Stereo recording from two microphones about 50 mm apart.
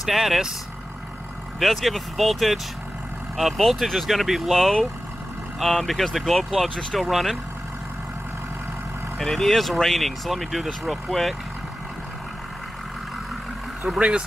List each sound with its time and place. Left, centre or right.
0.0 s speech: centre
1.6 s speech: centre
9.2 s speech: centre
13.9 s speech: right